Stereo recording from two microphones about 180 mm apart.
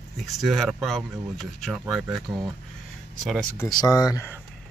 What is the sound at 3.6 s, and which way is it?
Speech, 20° left (ahead or behind).